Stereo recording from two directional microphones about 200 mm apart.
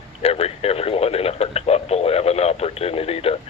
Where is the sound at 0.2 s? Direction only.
30° left (ahead or behind).